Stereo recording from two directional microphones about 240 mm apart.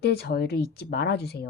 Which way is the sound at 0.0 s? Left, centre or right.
Left.